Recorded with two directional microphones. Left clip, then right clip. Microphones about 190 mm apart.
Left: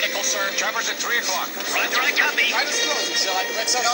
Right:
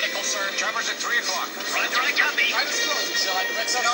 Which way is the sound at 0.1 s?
35° left (ahead or behind).